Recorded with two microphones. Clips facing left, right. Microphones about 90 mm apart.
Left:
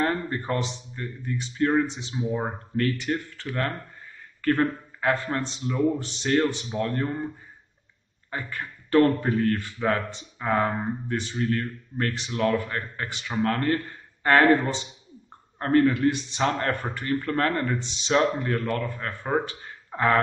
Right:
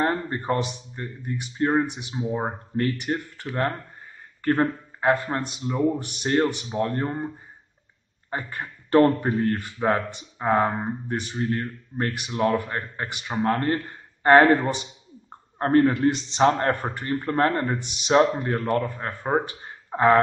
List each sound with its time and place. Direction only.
0.0 s a man's voice: 25° right (ahead or behind)
2.0 s a man's voice: 15° right (ahead or behind)
8.3 s a man's voice: 25° right (ahead or behind)
15.6 s a man's voice: 30° right (ahead or behind)